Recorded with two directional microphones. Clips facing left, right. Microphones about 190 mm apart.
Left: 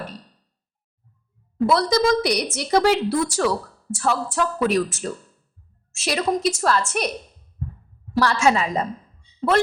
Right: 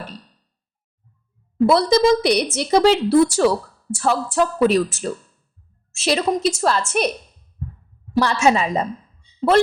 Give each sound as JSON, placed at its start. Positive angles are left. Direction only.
{"t": 1.6, "sound": "a woman's voice", "side_deg": -30}
{"t": 8.1, "sound": "a woman's voice", "side_deg": -20}